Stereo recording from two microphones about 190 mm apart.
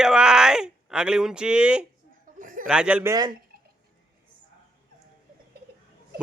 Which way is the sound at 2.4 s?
45° right (ahead or behind).